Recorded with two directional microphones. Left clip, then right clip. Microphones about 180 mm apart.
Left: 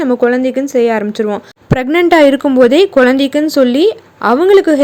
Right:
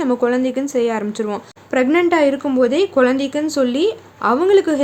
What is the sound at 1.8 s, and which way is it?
Speech, 35° left (ahead or behind).